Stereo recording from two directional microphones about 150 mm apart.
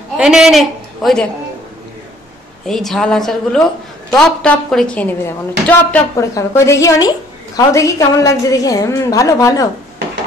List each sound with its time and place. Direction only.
0.2 s a man's voice: 5° right (ahead or behind)
2.6 s a woman's voice: centre (ahead or behind); by 9.7 s 20° left (ahead or behind)